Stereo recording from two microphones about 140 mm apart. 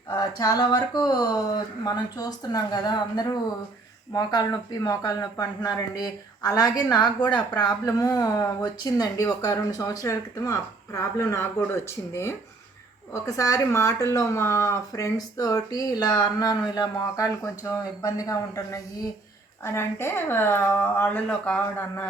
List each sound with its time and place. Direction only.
0.2 s speech: 25° left (ahead or behind); by 22.1 s 10° left (ahead or behind)